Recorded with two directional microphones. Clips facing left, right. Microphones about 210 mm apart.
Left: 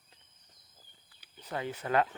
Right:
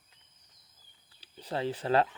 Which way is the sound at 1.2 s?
30° right (ahead or behind).